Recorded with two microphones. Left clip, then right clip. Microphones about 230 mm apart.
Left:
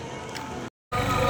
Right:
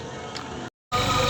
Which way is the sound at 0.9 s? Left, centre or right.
Right.